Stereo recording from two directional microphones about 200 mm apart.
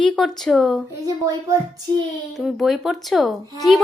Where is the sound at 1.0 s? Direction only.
15° right (ahead or behind).